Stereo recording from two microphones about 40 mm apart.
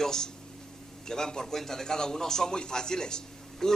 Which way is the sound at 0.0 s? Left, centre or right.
Centre.